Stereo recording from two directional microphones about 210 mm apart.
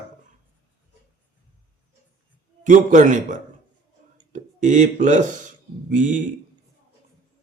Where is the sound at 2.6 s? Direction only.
35° right (ahead or behind).